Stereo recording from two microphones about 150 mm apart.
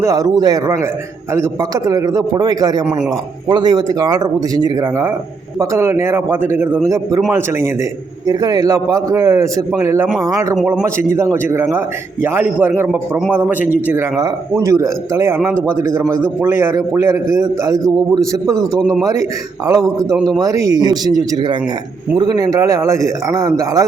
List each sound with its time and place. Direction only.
0.0 s a man's voice: 25° right (ahead or behind)
8.3 s a man's voice: 25° right (ahead or behind)